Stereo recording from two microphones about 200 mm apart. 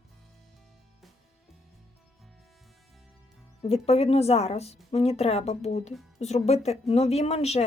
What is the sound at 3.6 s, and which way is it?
A woman's voice, 30° left (ahead or behind).